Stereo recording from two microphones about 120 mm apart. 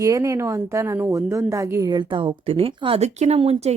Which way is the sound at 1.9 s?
40° right (ahead or behind).